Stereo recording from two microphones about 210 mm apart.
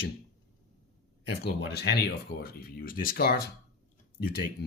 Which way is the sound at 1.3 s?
50° left (ahead or behind).